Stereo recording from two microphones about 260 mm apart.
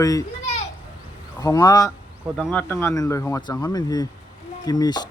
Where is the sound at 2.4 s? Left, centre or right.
Centre.